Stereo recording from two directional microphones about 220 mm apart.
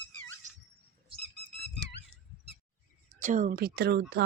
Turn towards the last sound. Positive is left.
turn(degrees=-50)  # may be behind; listen again after turning